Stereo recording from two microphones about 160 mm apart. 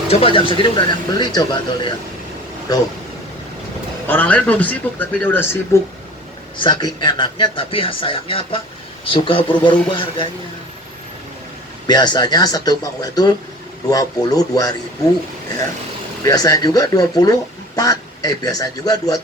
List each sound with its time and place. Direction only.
0.1 s speech: 35° left (ahead or behind)
4.0 s speech: 10° left (ahead or behind)
6.6 s speech: 25° left (ahead or behind)
11.9 s speech: 25° left (ahead or behind)
16.2 s speech: 20° left (ahead or behind)